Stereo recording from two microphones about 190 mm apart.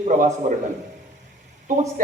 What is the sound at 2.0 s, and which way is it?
Speech, 45° right (ahead or behind).